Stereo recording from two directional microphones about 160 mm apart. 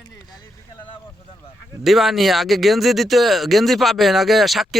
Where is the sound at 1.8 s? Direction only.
Centre (ahead or behind).